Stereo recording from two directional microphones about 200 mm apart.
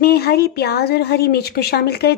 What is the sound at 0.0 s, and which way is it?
A woman's voice, 50° left (ahead or behind).